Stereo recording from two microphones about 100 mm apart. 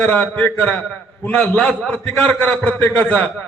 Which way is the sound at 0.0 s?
15° left (ahead or behind).